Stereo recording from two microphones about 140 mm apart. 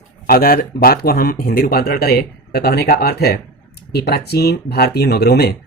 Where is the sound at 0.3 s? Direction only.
90° left.